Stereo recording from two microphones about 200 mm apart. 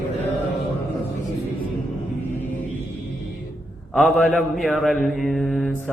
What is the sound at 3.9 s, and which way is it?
Mantra, centre (ahead or behind).